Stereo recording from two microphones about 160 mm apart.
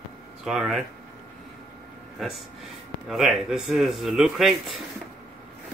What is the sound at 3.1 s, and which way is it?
Speech, centre (ahead or behind).